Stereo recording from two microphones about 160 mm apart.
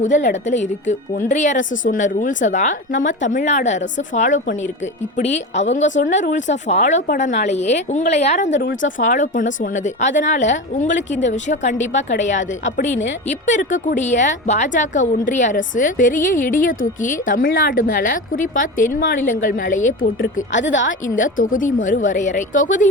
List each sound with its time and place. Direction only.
0.4 s speech: 50° left (ahead or behind)